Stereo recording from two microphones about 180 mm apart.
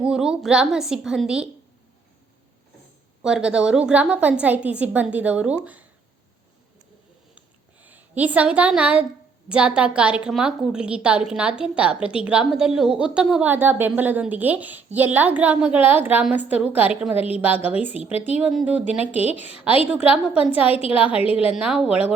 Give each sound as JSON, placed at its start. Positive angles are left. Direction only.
{"t": 0.0, "sound": "a woman's voice", "side_deg": -5}
{"t": 3.2, "sound": "a woman's voice", "side_deg": -5}
{"t": 7.3, "sound": "a sound", "side_deg": -10}
{"t": 9.5, "sound": "a woman's voice", "side_deg": -5}
{"t": 17.2, "sound": "a woman's voice", "side_deg": 30}
{"t": 18.3, "sound": "a woman's voice", "side_deg": -5}
{"t": 19.1, "sound": "a woman's voice", "side_deg": 35}
{"t": 19.9, "sound": "a woman's voice", "side_deg": -5}
{"t": 20.7, "sound": "a woman's voice", "side_deg": 30}
{"t": 21.4, "sound": "a woman's voice", "side_deg": -5}